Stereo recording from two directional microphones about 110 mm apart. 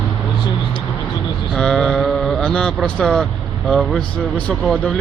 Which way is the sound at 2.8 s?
5° left (ahead or behind).